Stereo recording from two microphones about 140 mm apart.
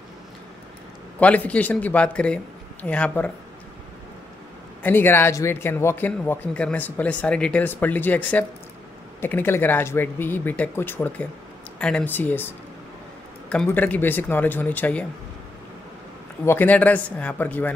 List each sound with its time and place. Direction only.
1.2 s speech: 10° left (ahead or behind)
4.8 s speech: 15° left (ahead or behind)
16.4 s speech: 10° left (ahead or behind)